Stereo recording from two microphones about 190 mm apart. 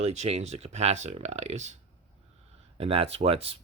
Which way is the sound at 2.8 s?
30° right (ahead or behind).